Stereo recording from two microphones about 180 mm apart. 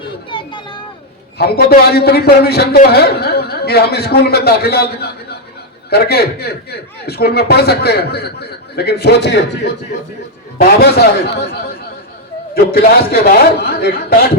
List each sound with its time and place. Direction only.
0.3 s a sound: 25° left (ahead or behind)
1.4 s a man's voice: 60° left (ahead or behind)
10.6 s a man's voice: 65° left (ahead or behind)